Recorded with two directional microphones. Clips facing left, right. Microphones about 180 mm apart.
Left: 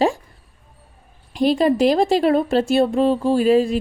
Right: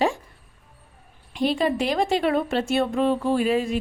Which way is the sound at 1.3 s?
40° left (ahead or behind).